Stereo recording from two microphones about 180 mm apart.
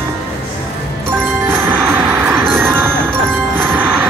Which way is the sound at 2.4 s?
Centre (ahead or behind).